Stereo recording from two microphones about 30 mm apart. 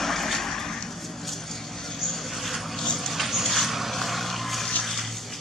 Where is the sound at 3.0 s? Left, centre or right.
Centre.